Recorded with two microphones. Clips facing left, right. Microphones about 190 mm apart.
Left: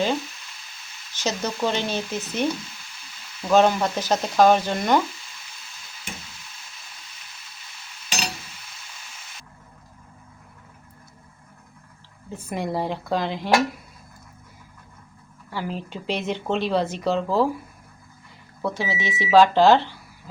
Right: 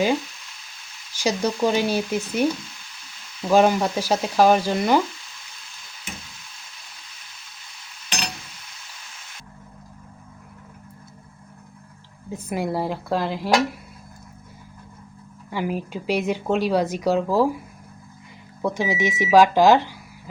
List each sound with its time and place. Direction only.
1.1 s speech: 10° right (ahead or behind)
12.3 s speech: 5° right (ahead or behind)
15.4 s speech: 15° right (ahead or behind)
18.6 s speech: 15° right (ahead or behind)